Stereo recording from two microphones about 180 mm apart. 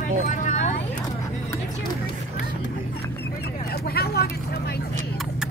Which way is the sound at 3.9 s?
60° left (ahead or behind).